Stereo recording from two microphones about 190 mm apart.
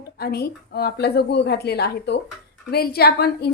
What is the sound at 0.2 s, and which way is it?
A woman's voice, 55° left (ahead or behind).